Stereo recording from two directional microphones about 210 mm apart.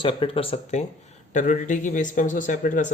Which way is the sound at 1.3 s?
35° left (ahead or behind).